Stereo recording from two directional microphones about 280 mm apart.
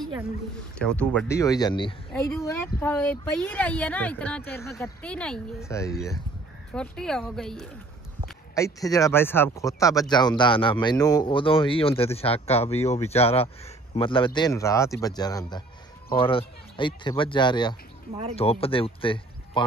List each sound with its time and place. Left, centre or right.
0.7 s speech: centre
8.5 s speech: centre